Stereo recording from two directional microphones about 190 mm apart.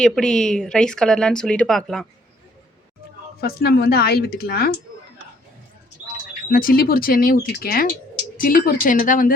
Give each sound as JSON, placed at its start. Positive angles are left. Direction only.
{"t": 0.0, "sound": "speech", "side_deg": 5}
{"t": 3.4, "sound": "speech", "side_deg": 55}
{"t": 6.5, "sound": "speech", "side_deg": 50}